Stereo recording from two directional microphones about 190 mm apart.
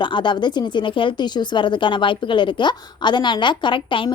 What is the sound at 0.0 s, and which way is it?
A woman's voice, 25° left (ahead or behind).